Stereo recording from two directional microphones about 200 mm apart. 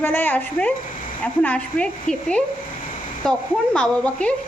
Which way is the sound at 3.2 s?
5° left (ahead or behind).